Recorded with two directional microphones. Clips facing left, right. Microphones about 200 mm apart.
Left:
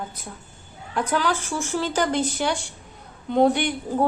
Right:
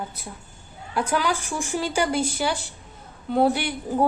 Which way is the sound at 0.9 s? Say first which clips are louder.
Even; 10° right (ahead or behind).